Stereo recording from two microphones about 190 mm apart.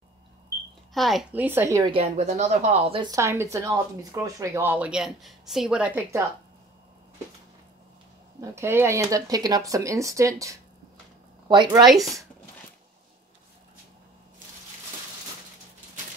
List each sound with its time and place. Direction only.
0.9 s a woman's voice: centre (ahead or behind)
1.8 s a woman's voice: 30° right (ahead or behind); by 6.2 s 10° right (ahead or behind)
8.4 s a woman's voice: 15° right (ahead or behind)
11.8 s speech: centre (ahead or behind)